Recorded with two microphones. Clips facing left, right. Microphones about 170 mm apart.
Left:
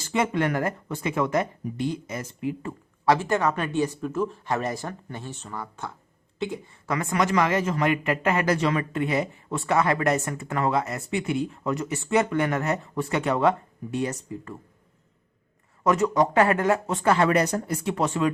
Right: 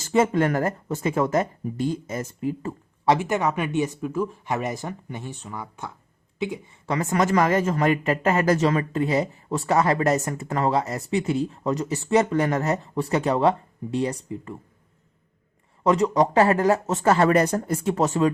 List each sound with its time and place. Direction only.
0.0 s speech: 40° right (ahead or behind)
3.1 s speech: 15° right (ahead or behind)
4.0 s speech: 10° right (ahead or behind)
6.8 s speech: 30° right (ahead or behind)
7.2 s speech: 40° right (ahead or behind)
15.8 s speech: 30° right (ahead or behind)